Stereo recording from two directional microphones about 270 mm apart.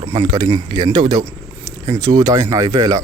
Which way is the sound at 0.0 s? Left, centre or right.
Centre.